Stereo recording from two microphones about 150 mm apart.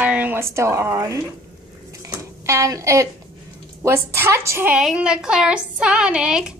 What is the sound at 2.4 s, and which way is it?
A woman's voice, 20° right (ahead or behind).